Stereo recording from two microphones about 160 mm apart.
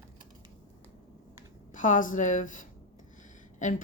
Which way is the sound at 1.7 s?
55° left (ahead or behind).